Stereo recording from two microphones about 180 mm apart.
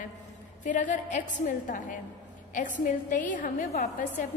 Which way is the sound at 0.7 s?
45° left (ahead or behind).